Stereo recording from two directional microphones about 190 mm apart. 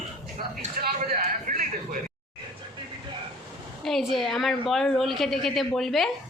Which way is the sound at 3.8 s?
Centre (ahead or behind).